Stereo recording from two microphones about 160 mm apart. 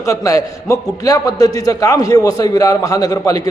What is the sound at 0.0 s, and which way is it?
A man's voice, 20° left (ahead or behind).